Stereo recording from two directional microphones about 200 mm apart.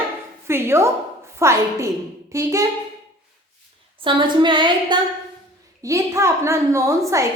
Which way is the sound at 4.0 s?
25° right (ahead or behind).